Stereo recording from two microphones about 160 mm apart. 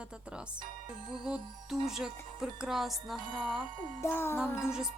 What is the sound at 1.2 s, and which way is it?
Speech, 5° right (ahead or behind).